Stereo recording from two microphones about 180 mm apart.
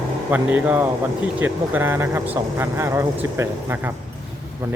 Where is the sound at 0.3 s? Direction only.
10° right (ahead or behind).